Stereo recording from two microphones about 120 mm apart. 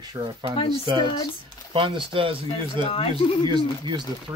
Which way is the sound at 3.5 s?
40° right (ahead or behind).